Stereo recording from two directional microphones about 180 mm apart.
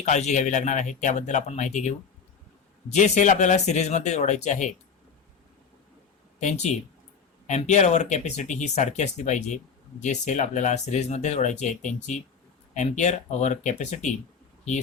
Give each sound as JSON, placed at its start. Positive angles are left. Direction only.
{"t": 0.0, "sound": "speech", "side_deg": 40}
{"t": 2.9, "sound": "speech", "side_deg": 40}
{"t": 7.4, "sound": "speech", "side_deg": 40}